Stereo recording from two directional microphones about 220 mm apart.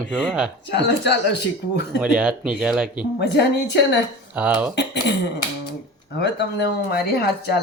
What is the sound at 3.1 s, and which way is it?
Speech, 50° left (ahead or behind).